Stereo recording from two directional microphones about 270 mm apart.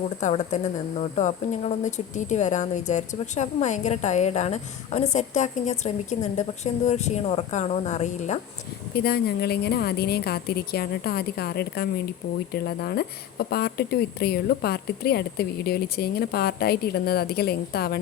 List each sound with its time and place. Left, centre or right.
0.2 s a woman's voice: left
9.0 s a woman's voice: left